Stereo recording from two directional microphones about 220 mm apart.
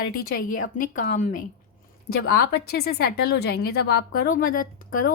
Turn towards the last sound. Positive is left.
turn(degrees=40)  # may be behind; listen again after turning